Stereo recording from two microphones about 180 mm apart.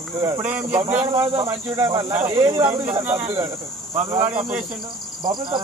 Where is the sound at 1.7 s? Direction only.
15° right (ahead or behind).